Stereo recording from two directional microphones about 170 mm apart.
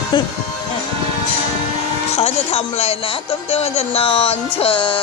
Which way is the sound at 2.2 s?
35° left (ahead or behind).